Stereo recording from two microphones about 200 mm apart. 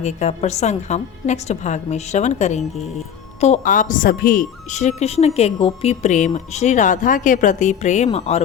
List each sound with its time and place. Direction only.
0.0 s a woman's voice: 35° left (ahead or behind)